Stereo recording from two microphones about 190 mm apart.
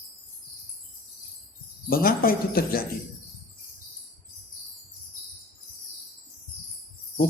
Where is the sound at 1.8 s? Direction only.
50° left (ahead or behind).